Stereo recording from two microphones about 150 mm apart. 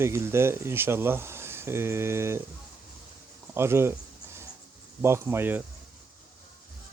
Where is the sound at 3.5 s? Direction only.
15° right (ahead or behind).